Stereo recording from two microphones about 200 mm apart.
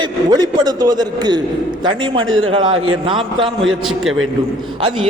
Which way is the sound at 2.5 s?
25° right (ahead or behind).